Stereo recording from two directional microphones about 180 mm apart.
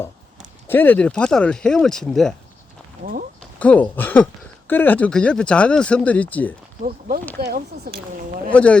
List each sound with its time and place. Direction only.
0.7 s speech: 10° left (ahead or behind)
3.6 s speech: 10° left (ahead or behind)
7.4 s speech: 60° right (ahead or behind)
8.5 s speech: 5° left (ahead or behind)